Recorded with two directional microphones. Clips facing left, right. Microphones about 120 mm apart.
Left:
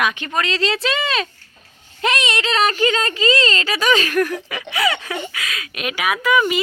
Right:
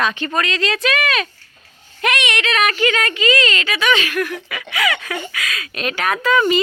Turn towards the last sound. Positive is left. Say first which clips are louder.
# right 2 dB
turn(degrees=10)  # may be behind; listen again after turning